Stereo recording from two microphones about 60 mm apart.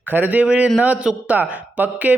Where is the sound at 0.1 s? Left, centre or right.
Right.